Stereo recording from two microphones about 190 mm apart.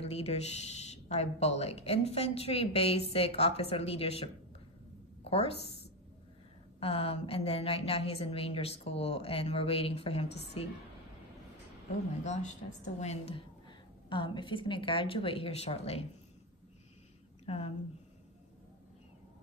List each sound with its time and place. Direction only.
0.0 s speech: 35° left (ahead or behind)
5.2 s a sound: 30° left (ahead or behind)
6.8 s speech: 30° left (ahead or behind)
12.2 s a woman's voice: 40° left (ahead or behind)
17.5 s speech: 30° left (ahead or behind)